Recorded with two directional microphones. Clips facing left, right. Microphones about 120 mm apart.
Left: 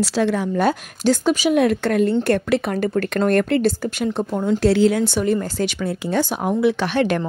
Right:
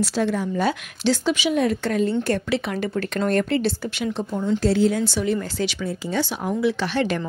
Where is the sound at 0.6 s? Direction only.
50° left (ahead or behind).